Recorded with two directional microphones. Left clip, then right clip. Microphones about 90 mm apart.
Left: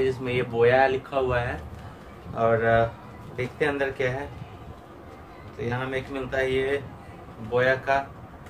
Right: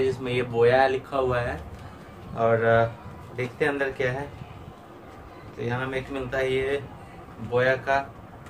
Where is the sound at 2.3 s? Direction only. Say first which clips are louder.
Even; 15° left (ahead or behind).